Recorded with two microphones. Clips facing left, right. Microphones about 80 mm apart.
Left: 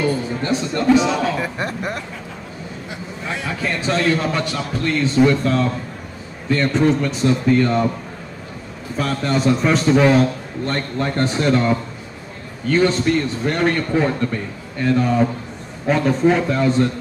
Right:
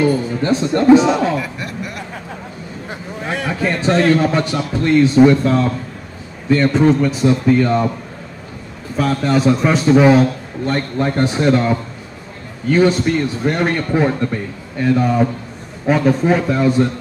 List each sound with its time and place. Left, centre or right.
0.4 s speech: right
1.4 s speech: left
2.9 s a sound: right
3.4 s a man's voice: right
4.2 s a man's voice: right; by 7.9 s centre
8.9 s a man's voice: centre